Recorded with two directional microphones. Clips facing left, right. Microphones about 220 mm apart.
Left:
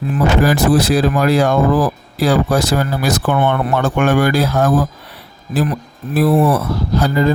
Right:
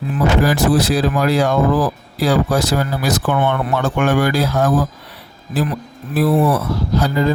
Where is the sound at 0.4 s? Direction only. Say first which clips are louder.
Left 2 dB; 55° left (ahead or behind).